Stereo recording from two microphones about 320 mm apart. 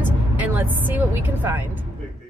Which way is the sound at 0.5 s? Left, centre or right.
Centre.